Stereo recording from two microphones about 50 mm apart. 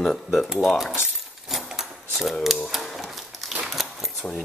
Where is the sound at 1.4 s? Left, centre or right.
Centre.